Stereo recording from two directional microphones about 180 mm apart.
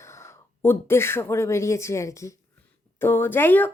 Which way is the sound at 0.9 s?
15° left (ahead or behind).